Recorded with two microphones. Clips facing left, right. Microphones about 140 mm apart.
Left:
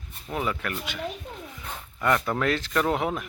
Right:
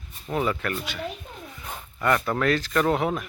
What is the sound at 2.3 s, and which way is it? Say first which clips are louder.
Speech: right 2 dB; 20° left (ahead or behind).